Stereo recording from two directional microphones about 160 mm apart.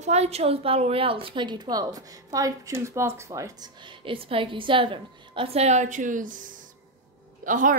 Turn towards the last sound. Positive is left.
turn(degrees=-55)  # may be behind; listen again after turning